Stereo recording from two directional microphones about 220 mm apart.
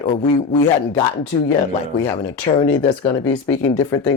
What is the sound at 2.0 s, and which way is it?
Speech, 20° left (ahead or behind).